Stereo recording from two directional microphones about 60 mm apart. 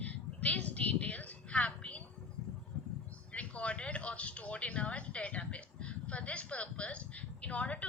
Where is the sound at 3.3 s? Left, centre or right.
Centre.